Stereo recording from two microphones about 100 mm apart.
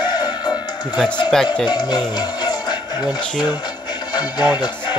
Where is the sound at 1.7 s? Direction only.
45° left (ahead or behind).